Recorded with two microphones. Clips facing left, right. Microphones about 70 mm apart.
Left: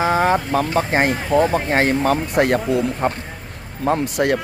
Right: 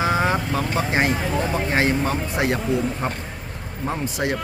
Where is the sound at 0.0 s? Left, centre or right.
Left.